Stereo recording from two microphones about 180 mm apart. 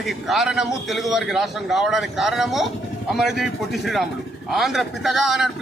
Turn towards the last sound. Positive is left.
turn(degrees=0)  # may be behind; listen again after turning